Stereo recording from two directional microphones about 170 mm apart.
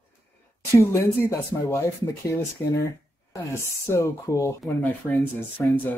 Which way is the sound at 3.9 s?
20° left (ahead or behind).